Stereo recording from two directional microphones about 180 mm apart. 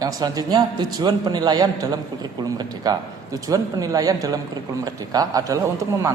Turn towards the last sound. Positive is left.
turn(degrees=-15)  # may be behind; listen again after turning